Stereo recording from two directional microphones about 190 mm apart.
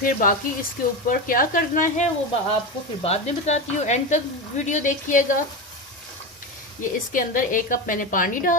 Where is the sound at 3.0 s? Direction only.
35° left (ahead or behind).